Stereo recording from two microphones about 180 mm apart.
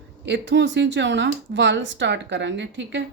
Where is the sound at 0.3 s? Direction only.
75° right (ahead or behind).